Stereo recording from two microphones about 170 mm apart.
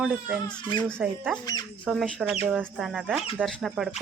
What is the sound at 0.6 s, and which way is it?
Speech, 25° left (ahead or behind).